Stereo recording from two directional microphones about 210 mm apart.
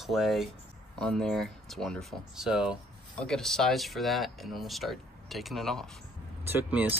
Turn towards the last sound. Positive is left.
turn(degrees=-5)  # may be behind; listen again after turning